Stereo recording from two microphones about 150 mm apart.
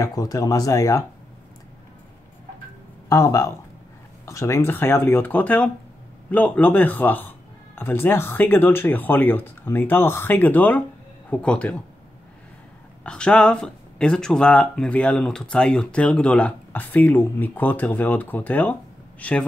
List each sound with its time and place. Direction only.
0.0 s speech: 25° left (ahead or behind)
3.1 s speech: 20° left (ahead or behind)
13.0 s speech: 5° left (ahead or behind)